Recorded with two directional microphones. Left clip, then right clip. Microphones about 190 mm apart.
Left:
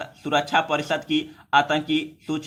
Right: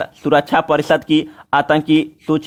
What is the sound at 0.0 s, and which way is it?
Speech, 45° right (ahead or behind).